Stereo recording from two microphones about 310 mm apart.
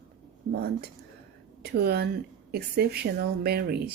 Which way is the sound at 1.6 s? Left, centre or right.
Right.